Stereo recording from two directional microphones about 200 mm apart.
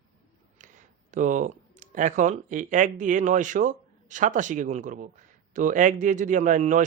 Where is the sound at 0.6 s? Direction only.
40° right (ahead or behind).